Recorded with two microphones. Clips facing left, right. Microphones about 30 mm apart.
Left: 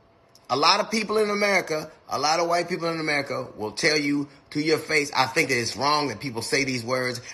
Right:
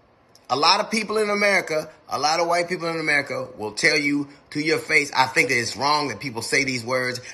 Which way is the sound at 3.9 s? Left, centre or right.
Right.